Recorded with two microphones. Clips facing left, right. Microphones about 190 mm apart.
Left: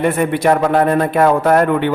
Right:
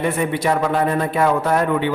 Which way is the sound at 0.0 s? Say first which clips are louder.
Left 5 dB; 55° left (ahead or behind).